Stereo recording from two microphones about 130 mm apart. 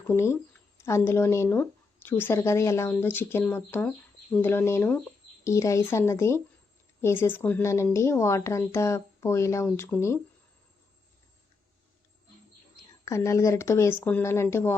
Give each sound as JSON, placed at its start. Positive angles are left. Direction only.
{"t": 0.0, "sound": "speech", "side_deg": 20}
{"t": 12.7, "sound": "speech", "side_deg": 20}